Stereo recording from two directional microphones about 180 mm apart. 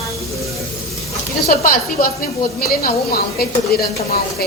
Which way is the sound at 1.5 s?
50° left (ahead or behind).